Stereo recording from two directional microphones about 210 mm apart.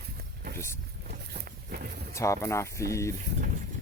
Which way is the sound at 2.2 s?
15° left (ahead or behind).